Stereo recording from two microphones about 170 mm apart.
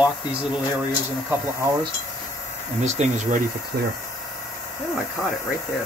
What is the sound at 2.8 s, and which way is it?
Speech, 40° right (ahead or behind).